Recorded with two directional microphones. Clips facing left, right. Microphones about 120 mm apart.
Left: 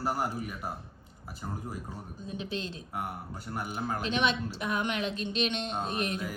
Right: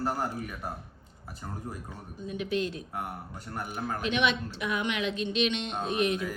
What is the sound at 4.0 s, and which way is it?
Speech, 35° left (ahead or behind).